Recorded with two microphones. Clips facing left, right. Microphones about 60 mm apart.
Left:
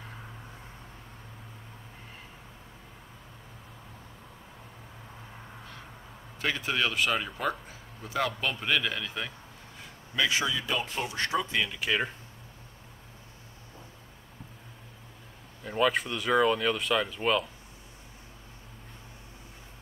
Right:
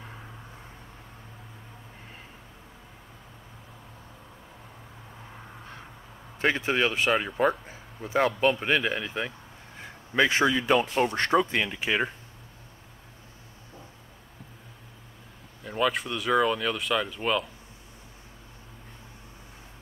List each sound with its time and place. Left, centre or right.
6.4 s speech: right
10.1 s speech: right
15.6 s speech: centre